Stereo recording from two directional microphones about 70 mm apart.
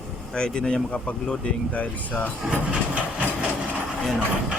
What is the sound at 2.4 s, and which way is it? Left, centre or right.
Speech, centre.